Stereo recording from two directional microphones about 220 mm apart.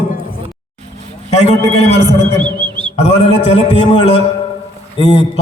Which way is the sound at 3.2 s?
30° left (ahead or behind).